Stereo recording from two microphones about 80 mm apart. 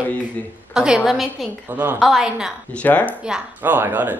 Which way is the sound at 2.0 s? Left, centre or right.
Centre.